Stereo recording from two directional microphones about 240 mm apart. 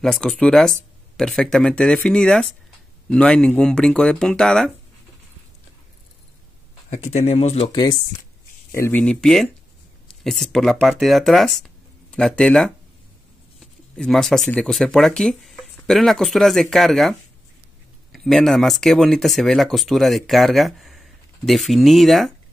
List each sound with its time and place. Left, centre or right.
0.0 s speech: centre
7.1 s speech: left; by 17.1 s centre
18.1 s speech: centre